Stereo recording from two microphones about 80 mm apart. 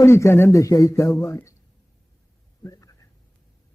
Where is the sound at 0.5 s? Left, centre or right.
Left.